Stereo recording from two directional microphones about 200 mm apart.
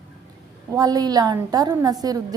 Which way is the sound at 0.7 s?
20° right (ahead or behind).